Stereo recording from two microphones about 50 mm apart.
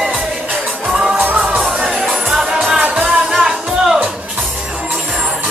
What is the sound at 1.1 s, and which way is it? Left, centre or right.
Music, right.